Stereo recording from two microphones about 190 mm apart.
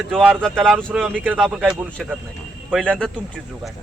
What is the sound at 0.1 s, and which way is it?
Speech, 5° right (ahead or behind).